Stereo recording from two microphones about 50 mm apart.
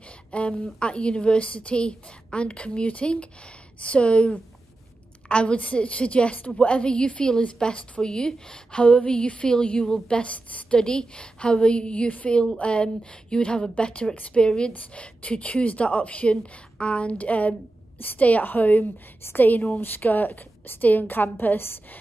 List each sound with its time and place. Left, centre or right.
0.3 s a woman's voice: left